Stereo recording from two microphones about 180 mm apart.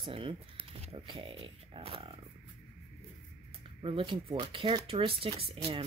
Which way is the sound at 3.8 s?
30° right (ahead or behind).